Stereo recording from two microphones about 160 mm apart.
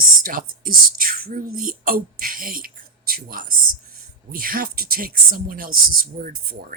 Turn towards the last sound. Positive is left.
turn(degrees=-65)  # may be behind; listen again after turning